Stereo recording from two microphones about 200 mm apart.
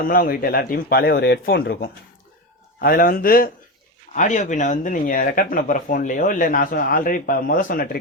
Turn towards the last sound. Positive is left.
turn(degrees=45)  # may be behind; listen again after turning